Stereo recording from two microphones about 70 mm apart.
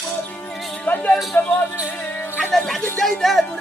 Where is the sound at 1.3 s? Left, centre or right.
Left.